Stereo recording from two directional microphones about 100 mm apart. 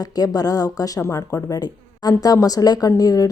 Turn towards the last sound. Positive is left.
turn(degrees=35)  # may be behind; listen again after turning